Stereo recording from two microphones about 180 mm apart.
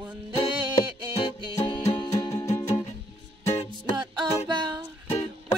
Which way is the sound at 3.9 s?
25° right (ahead or behind).